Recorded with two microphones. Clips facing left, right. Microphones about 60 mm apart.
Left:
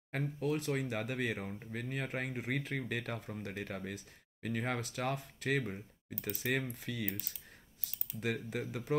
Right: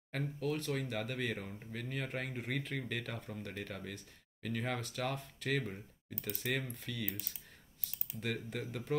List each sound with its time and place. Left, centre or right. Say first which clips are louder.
0.4 s speech: left 2 dB; centre
8.2 s speech: left 3 dB; centre